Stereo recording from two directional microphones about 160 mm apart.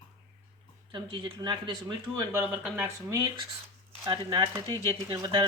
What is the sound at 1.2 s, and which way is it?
Speech, 30° right (ahead or behind).